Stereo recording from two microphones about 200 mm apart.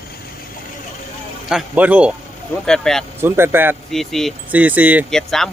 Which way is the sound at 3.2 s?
10° right (ahead or behind).